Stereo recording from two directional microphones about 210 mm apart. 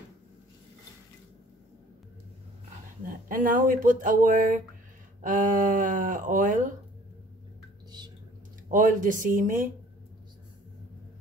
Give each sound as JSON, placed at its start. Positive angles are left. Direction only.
{"t": 3.3, "sound": "speech", "side_deg": -40}
{"t": 8.6, "sound": "speech", "side_deg": -40}